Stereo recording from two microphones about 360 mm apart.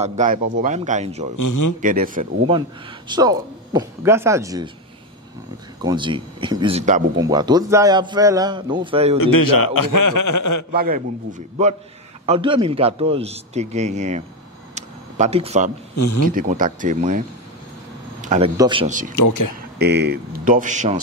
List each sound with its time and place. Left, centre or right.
0.0 s a man's voice: centre
1.3 s a man's voice: left
1.8 s a man's voice: right
5.8 s speech: centre
9.2 s a man's voice: left
10.7 s a man's voice: right
14.8 s a sound: centre
16.0 s speech: left
16.3 s a man's voice: right
18.2 s a man's voice: centre
19.1 s a man's voice: left
19.8 s a man's voice: right